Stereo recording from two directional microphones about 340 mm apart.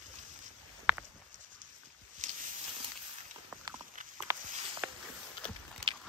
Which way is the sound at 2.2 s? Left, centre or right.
Right.